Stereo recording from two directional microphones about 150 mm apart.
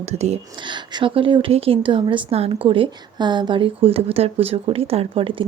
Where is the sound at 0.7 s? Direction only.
35° right (ahead or behind).